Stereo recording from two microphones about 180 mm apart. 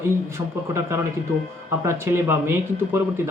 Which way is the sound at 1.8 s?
15° right (ahead or behind).